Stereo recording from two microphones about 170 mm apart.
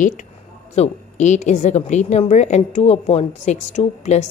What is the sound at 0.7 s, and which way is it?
A woman's voice, 45° left (ahead or behind).